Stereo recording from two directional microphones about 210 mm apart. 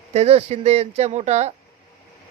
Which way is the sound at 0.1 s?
30° right (ahead or behind).